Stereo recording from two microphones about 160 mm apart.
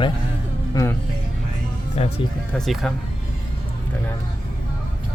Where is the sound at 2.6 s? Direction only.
Centre (ahead or behind).